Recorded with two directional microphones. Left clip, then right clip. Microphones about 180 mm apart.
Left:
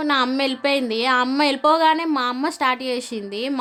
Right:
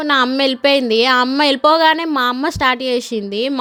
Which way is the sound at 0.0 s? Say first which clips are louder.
Right 5 dB; 30° right (ahead or behind).